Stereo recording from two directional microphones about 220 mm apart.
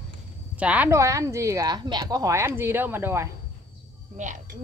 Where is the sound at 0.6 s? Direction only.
5° right (ahead or behind).